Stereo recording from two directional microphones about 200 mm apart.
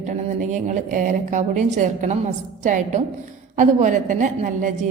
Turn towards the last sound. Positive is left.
turn(degrees=-40)  # may be behind; listen again after turning